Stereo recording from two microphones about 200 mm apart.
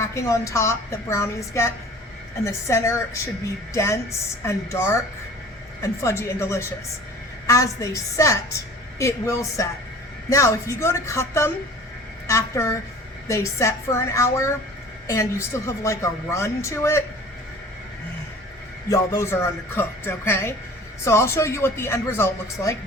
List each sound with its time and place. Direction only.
0.0 s a woman's voice: 15° left (ahead or behind)
18.9 s a woman's voice: 15° left (ahead or behind)